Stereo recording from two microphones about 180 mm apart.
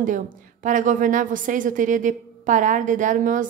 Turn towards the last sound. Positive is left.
turn(degrees=-45)  # may be behind; listen again after turning